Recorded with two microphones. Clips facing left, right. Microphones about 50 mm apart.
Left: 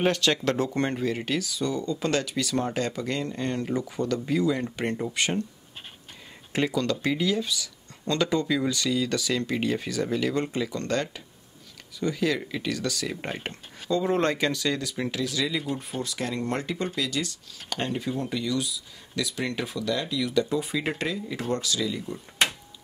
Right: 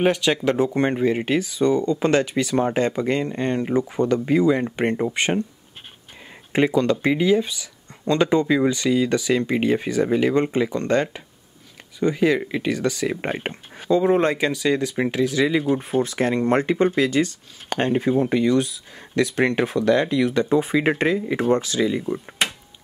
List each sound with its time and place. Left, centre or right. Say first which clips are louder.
0.0 s speech: right 4 dB; centre
6.5 s speech: right 7 dB; right